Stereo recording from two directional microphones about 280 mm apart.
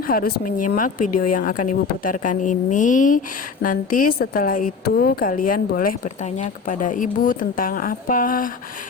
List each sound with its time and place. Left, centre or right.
0.1 s a woman's voice: left